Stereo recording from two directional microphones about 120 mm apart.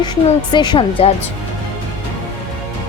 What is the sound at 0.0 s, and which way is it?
A woman's voice, 40° left (ahead or behind).